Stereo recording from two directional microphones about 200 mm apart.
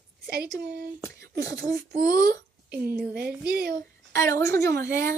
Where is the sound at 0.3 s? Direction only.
55° right (ahead or behind).